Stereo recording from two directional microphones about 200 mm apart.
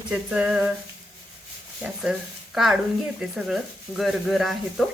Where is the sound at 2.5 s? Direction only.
Centre (ahead or behind).